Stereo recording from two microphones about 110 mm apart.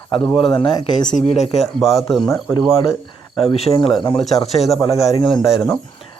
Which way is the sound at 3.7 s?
45° left (ahead or behind).